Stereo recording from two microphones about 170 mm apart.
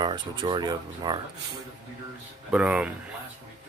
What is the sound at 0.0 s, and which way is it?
Speech, 25° right (ahead or behind).